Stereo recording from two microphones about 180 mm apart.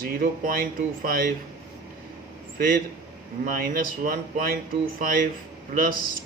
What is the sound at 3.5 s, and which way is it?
Speech, 55° right (ahead or behind).